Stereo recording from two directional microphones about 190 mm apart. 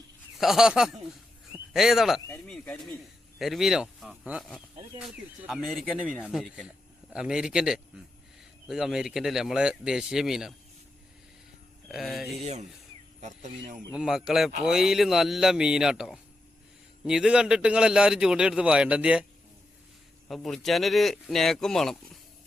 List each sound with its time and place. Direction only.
0.3 s a man's voice: centre (ahead or behind)
2.2 s a man's voice: 10° left (ahead or behind)
11.9 s a man's voice: centre (ahead or behind)
12.4 s speech: 35° right (ahead or behind)
13.9 s a man's voice: 5° right (ahead or behind)
20.2 s a man's voice: centre (ahead or behind)